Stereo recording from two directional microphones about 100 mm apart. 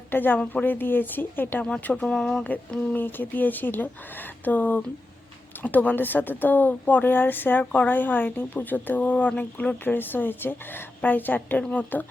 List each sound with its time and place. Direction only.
0.1 s a woman's voice: 20° left (ahead or behind)
2.4 s a woman's voice: 15° left (ahead or behind)